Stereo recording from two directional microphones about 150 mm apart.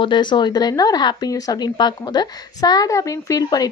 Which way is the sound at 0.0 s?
30° left (ahead or behind).